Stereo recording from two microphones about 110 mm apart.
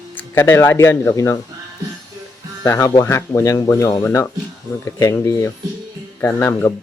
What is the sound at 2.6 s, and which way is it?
Speech, 30° left (ahead or behind).